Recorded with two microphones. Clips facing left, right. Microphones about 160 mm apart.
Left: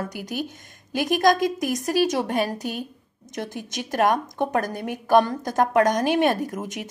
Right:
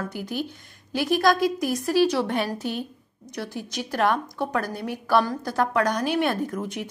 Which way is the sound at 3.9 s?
45° left (ahead or behind).